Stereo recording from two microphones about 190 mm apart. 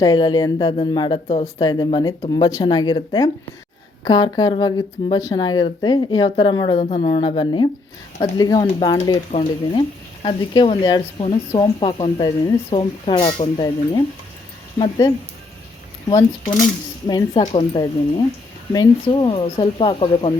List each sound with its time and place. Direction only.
0.0 s speech: 20° left (ahead or behind)